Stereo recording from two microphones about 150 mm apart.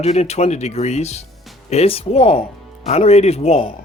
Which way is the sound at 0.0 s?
45° left (ahead or behind).